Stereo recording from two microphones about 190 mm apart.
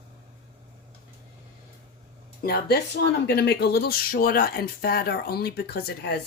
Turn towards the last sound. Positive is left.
turn(degrees=60)  # may be behind; listen again after turning